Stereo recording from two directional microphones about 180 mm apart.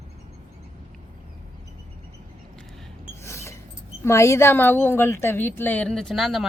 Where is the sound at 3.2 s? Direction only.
15° left (ahead or behind).